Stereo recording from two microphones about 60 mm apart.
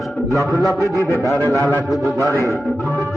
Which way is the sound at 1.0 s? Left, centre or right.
Left.